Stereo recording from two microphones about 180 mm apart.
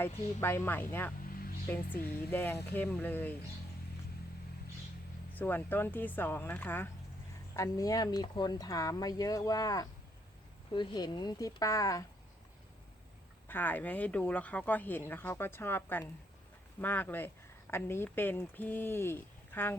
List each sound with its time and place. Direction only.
0.0 s speech: 15° left (ahead or behind)
5.3 s speech: 10° left (ahead or behind)
13.5 s speech: 10° left (ahead or behind)